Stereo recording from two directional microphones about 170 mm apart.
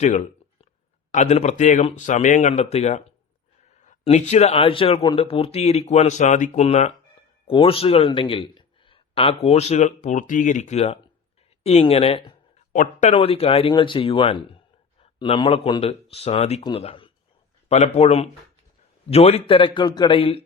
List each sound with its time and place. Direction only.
0.0 s a sound: 45° left (ahead or behind)
1.1 s a man's voice: 40° left (ahead or behind)
12.7 s speech: 50° left (ahead or behind)
13.1 s a man's voice: 35° left (ahead or behind)